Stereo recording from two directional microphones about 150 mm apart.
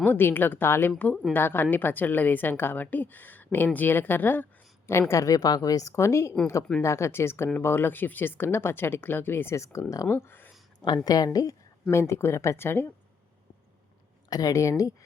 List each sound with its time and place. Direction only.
0.0 s speech: 15° left (ahead or behind)
10.8 s speech: 25° left (ahead or behind)
14.3 s speech: 25° left (ahead or behind)